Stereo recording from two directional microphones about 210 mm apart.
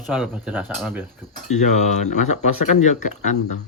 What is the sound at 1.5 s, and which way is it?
Speech, 35° left (ahead or behind).